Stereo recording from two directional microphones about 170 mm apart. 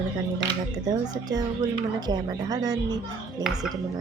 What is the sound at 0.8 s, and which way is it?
Speech, 25° right (ahead or behind).